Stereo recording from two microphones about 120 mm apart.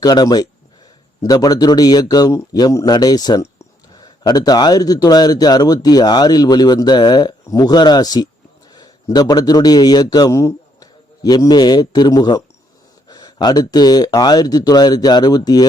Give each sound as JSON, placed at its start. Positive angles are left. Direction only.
{"t": 0.0, "sound": "a man's voice", "side_deg": 35}